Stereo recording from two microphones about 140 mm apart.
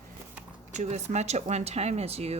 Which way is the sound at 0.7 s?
55° right (ahead or behind).